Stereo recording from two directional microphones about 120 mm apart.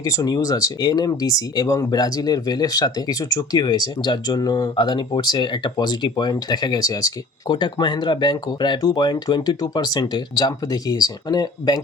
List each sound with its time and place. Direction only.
0.0 s speech: 30° left (ahead or behind)